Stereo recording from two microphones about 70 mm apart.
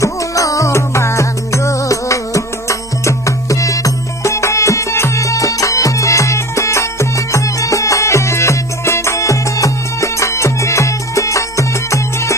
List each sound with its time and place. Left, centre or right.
0.0 s music: left